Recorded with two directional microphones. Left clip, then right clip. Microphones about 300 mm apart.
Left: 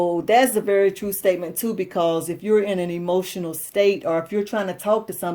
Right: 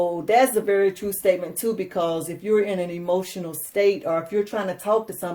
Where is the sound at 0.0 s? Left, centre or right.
Left.